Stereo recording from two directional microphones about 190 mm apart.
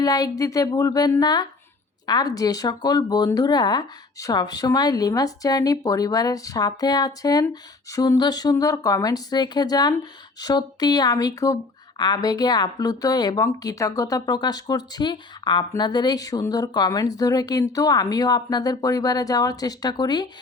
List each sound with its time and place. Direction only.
0.0 s speech: 20° left (ahead or behind)